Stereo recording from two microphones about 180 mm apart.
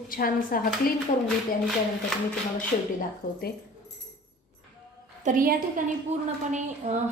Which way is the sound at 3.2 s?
50° left (ahead or behind).